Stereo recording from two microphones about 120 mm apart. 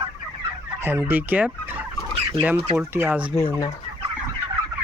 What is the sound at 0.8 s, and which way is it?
Speech, 20° right (ahead or behind).